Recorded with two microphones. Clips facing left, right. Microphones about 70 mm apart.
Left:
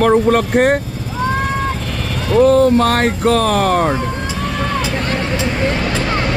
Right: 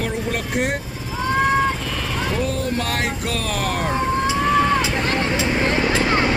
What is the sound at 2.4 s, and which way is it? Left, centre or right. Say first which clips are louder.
Speech: left 13 dB; left.